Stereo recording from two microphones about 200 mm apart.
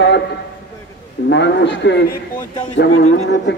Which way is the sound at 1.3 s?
60° left (ahead or behind).